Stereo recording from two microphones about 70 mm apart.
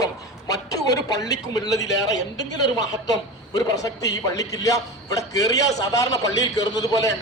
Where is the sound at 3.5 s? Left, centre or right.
Left.